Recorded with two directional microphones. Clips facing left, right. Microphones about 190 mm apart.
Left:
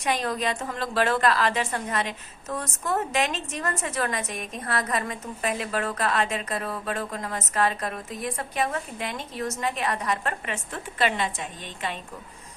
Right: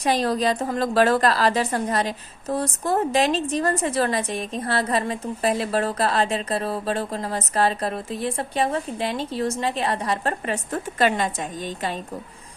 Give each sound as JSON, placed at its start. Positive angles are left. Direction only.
{"t": 0.0, "sound": "a woman's voice", "side_deg": -35}